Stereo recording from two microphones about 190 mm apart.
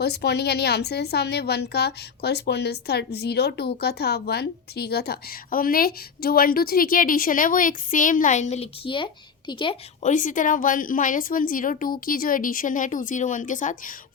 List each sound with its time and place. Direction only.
0.0 s a woman's voice: 60° left (ahead or behind); by 9.7 s 25° left (ahead or behind)
10.0 s a woman's voice: 40° left (ahead or behind)